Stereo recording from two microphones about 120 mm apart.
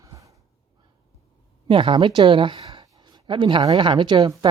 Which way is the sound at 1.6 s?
45° right (ahead or behind).